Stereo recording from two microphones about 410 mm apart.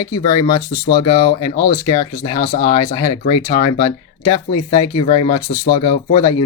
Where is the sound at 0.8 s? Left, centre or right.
Left.